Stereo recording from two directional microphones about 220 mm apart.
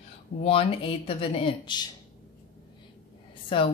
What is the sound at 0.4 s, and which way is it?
Speech, 25° left (ahead or behind).